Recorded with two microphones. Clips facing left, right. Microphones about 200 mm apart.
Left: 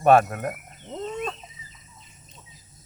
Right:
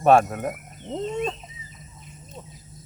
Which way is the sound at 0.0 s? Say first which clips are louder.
Even; centre (ahead or behind).